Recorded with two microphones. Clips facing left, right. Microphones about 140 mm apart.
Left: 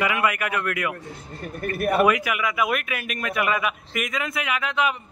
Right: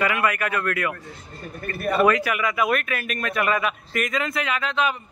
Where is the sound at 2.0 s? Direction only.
10° left (ahead or behind).